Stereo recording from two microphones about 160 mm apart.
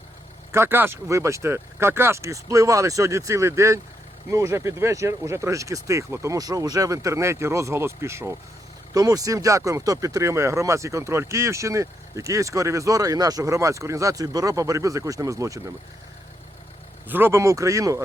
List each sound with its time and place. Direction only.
0.5 s speech: 15° right (ahead or behind)
17.1 s speech: 15° right (ahead or behind)